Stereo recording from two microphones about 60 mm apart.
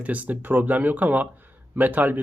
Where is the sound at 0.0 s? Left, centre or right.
Right.